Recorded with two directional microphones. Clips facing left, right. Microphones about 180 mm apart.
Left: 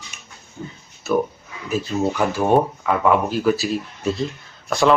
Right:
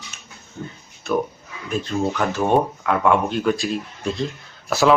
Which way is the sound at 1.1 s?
5° left (ahead or behind).